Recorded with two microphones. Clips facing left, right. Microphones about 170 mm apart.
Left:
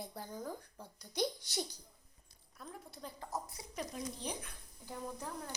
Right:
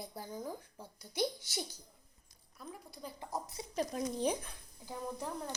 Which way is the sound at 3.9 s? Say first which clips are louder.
Right 10 dB; 50° right (ahead or behind).